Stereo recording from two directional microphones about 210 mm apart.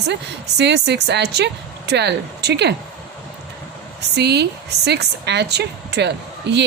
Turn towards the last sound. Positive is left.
turn(degrees=-55)  # may be behind; listen again after turning